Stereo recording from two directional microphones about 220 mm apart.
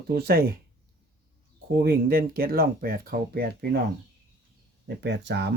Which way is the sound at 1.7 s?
45° right (ahead or behind).